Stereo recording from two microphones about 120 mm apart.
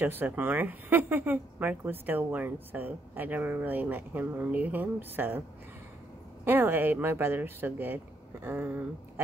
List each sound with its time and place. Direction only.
0.0 s speech: 15° right (ahead or behind)
6.4 s speech: 15° right (ahead or behind)